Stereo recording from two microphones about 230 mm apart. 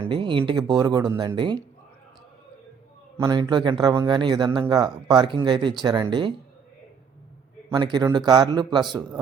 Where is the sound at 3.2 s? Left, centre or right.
Centre.